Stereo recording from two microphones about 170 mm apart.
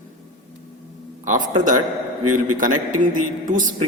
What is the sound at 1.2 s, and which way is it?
A man's voice, 50° right (ahead or behind).